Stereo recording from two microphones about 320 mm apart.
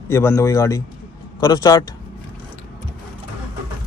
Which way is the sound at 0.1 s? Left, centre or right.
Centre.